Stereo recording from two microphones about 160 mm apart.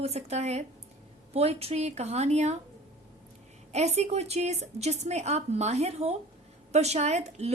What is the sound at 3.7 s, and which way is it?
A woman's voice, 45° right (ahead or behind).